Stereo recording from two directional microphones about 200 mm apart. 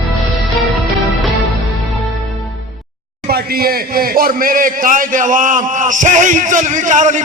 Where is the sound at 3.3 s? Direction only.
50° right (ahead or behind).